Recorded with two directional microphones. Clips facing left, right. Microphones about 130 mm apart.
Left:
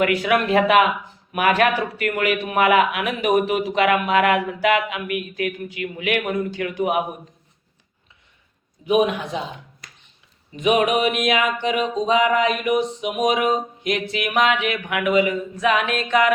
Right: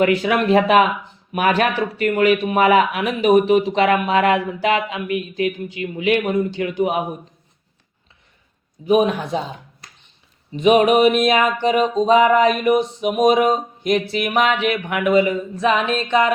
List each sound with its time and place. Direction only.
0.0 s a man's voice: 30° right (ahead or behind)
8.9 s music: 40° right (ahead or behind)
10.6 s music: 30° right (ahead or behind)